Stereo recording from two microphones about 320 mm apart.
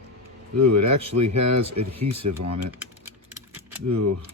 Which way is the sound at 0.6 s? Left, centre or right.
Right.